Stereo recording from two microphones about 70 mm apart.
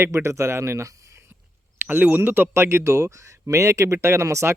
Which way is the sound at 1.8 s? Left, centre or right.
Right.